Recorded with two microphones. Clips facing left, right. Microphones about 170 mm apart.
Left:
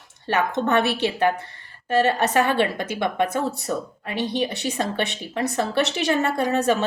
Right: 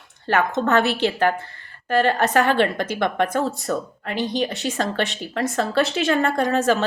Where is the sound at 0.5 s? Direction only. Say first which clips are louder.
Right 1 dB; 25° left (ahead or behind).